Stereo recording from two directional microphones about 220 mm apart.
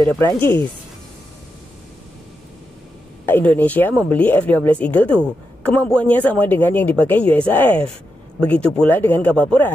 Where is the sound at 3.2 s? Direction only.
10° left (ahead or behind).